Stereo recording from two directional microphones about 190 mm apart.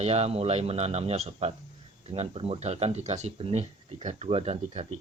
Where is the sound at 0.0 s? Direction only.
35° right (ahead or behind).